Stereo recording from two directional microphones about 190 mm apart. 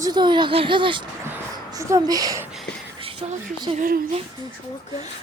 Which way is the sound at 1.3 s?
15° right (ahead or behind).